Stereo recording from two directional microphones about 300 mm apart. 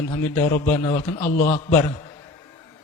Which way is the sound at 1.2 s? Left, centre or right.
Left.